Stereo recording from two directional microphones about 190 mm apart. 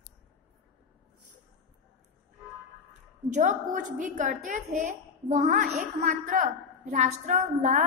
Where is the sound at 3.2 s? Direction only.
40° right (ahead or behind).